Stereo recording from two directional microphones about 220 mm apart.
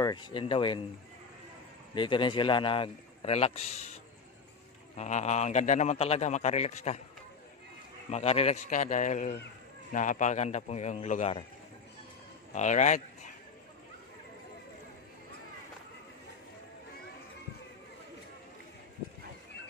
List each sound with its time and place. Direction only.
0.0 s speech: 20° left (ahead or behind)
2.0 s speech: 20° left (ahead or behind)
4.9 s a man's voice: 30° left (ahead or behind)
8.1 s a man's voice: 30° left (ahead or behind)
12.5 s speech: 35° left (ahead or behind)